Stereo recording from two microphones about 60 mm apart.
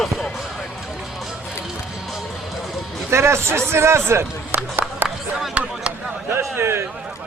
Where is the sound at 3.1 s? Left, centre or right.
Right.